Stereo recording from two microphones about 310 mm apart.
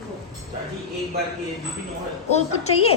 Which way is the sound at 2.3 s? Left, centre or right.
Left.